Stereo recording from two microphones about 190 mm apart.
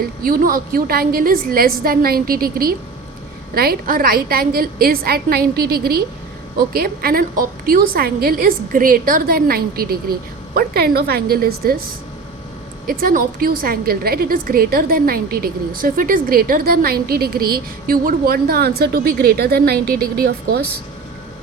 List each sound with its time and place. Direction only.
0.2 s a woman's voice: 50° right (ahead or behind)
12.9 s a woman's voice: 50° right (ahead or behind)